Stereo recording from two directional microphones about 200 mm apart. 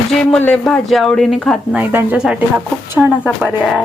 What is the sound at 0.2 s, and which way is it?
Speech, 5° left (ahead or behind).